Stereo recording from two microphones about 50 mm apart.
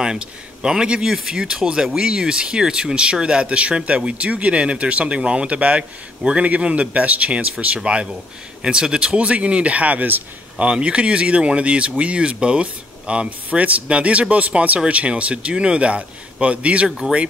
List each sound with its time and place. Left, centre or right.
0.0 s speech: centre